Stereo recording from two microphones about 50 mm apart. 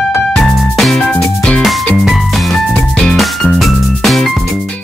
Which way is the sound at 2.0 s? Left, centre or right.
Centre.